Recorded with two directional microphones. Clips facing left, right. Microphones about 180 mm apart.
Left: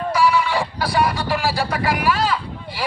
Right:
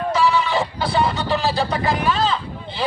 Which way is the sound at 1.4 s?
20° right (ahead or behind).